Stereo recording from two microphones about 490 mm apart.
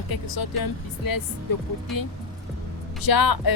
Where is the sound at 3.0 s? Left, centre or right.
Left.